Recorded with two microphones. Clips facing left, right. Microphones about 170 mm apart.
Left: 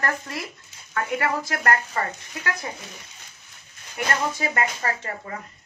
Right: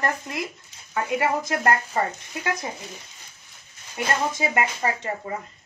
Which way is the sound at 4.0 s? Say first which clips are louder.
Right 1 dB; 25° right (ahead or behind).